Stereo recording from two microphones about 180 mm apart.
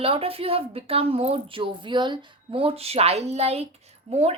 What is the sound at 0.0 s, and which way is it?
A woman's voice, 30° right (ahead or behind).